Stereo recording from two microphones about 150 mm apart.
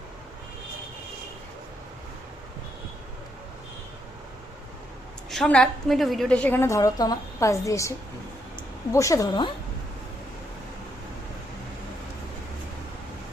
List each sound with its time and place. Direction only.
5.3 s a woman's voice: 5° left (ahead or behind); by 9.5 s 25° left (ahead or behind)